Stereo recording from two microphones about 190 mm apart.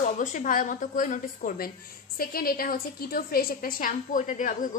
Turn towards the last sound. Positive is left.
turn(degrees=40)  # may be behind; listen again after turning